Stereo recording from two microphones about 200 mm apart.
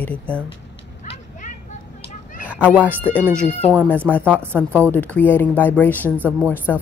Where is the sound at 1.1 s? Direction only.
40° left (ahead or behind).